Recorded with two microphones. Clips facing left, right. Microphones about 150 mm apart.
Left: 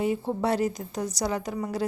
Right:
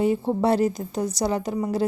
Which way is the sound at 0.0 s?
30° right (ahead or behind).